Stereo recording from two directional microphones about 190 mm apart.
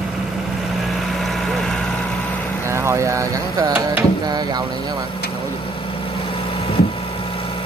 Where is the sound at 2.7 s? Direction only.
15° right (ahead or behind).